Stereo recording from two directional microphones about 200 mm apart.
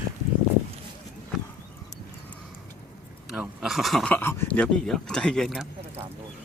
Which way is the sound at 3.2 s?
5° right (ahead or behind).